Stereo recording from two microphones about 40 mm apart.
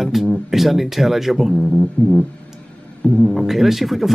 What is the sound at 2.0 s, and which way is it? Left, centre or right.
Music, left.